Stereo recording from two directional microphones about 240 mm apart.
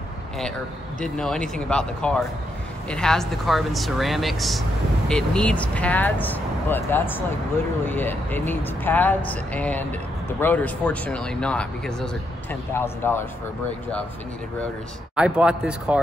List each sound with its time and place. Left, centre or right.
1.0 s speech: centre
15.1 s speech: centre